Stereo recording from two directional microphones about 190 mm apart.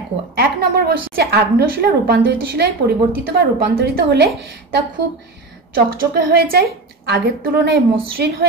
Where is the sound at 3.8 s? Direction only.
55° right (ahead or behind).